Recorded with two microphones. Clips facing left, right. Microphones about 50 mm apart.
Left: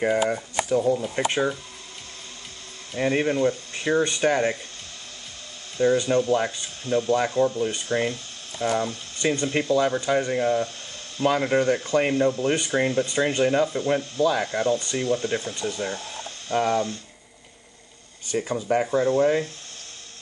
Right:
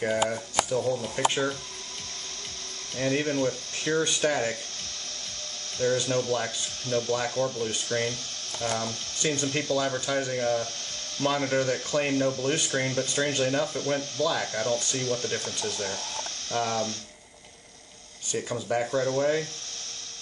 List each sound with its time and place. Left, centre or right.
0.7 s speech: centre
2.9 s speech: centre
5.8 s speech: centre
18.5 s speech: centre